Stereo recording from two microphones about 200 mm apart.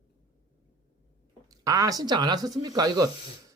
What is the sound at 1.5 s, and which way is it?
Speech, 15° right (ahead or behind).